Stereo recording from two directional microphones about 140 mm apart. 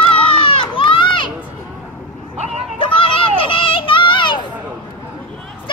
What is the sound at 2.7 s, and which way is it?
Children playing, 40° left (ahead or behind).